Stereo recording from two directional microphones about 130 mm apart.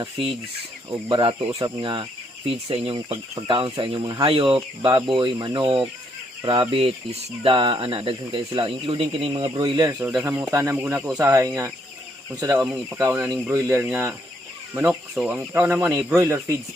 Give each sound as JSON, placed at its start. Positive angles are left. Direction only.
{"t": 0.0, "sound": "speech", "side_deg": -45}
{"t": 10.0, "sound": "speech", "side_deg": -5}
{"t": 10.5, "sound": "speech", "side_deg": -20}
{"t": 15.1, "sound": "speech", "side_deg": -5}
{"t": 15.4, "sound": "speech", "side_deg": -15}